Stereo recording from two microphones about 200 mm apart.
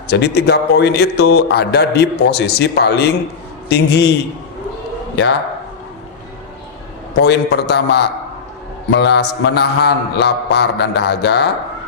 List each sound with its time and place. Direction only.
0.1 s a man's voice: 55° left (ahead or behind)
7.2 s a man's voice: 55° left (ahead or behind)